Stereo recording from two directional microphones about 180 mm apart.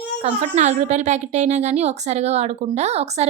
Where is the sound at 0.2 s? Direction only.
40° right (ahead or behind).